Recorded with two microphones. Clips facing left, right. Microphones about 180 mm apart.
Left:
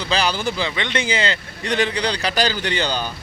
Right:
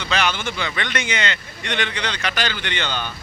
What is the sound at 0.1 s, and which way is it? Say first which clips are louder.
Speech: left 2 dB; 35° left (ahead or behind).